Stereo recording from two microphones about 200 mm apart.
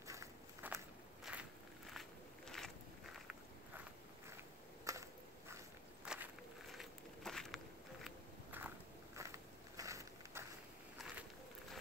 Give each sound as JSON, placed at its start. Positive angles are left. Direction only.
{"t": 0.0, "sound": "walk", "side_deg": -15}
{"t": 4.9, "sound": "a sound", "side_deg": -15}
{"t": 6.1, "sound": "walk", "side_deg": -5}